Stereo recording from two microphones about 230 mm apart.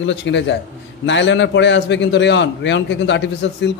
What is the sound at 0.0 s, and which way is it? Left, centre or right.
A man's voice, left.